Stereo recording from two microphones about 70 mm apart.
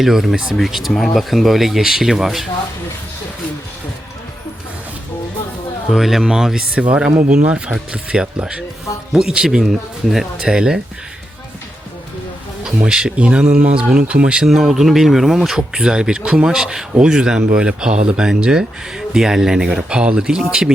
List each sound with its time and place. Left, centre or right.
0.0 s speech: centre
5.9 s speech: centre
12.6 s speech: centre